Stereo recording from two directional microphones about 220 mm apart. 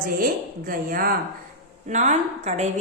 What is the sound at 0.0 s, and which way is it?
A woman's voice, 40° right (ahead or behind).